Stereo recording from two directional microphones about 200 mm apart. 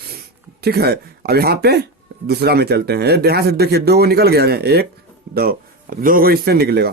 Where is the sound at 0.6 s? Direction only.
50° right (ahead or behind).